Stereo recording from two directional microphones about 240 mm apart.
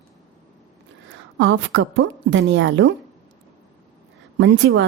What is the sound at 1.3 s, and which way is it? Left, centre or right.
A woman's voice, right.